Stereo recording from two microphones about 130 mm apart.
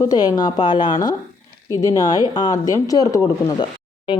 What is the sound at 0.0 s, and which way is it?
Speech, 30° left (ahead or behind).